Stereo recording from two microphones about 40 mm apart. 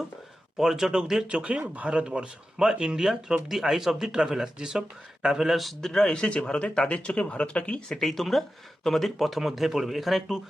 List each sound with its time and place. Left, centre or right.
0.5 s speech: centre
1.3 s a man's voice: right
5.8 s speech: centre; by 7.8 s left
7.9 s speech: centre